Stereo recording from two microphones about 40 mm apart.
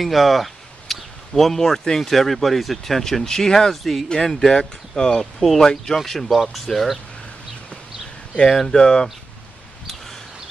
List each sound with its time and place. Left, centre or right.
0.0 s speech: centre
3.7 s speech: centre
4.1 s speech: centre
5.2 s speech: centre
5.6 s speech: centre
8.5 s speech: centre
8.7 s speech: centre